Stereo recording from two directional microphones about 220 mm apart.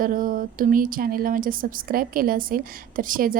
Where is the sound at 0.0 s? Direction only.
40° right (ahead or behind).